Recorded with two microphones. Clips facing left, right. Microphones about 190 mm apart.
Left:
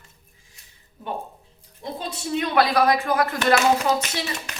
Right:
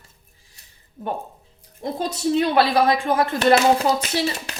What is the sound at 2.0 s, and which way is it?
Speech, 40° right (ahead or behind).